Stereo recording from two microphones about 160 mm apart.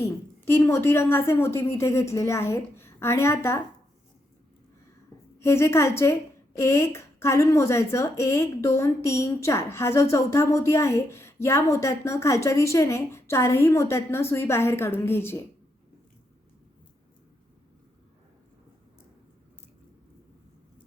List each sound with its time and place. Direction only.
0.0 s a woman's voice: 15° left (ahead or behind)
5.4 s a woman's voice: 15° left (ahead or behind)